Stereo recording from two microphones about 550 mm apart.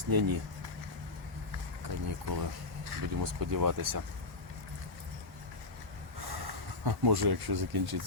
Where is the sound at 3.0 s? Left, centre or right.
Right.